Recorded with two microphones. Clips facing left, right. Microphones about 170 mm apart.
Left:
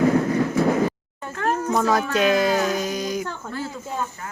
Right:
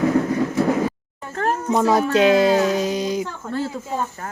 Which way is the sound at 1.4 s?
35° right (ahead or behind).